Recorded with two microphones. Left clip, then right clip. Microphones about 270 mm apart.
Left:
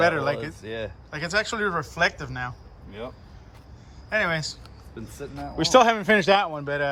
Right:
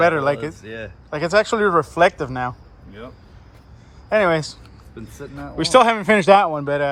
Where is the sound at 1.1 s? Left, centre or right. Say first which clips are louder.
Right 9 dB; centre.